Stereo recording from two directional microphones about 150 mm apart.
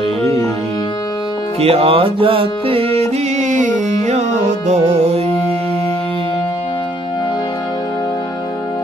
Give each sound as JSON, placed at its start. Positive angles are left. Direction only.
{"t": 1.6, "sound": "music", "side_deg": -40}